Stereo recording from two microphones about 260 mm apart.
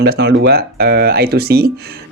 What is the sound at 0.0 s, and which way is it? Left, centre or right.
Speech, right.